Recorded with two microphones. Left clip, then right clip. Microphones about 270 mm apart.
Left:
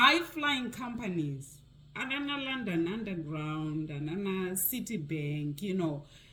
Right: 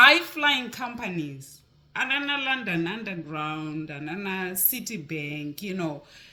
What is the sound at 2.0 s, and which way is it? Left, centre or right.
A man's voice, right.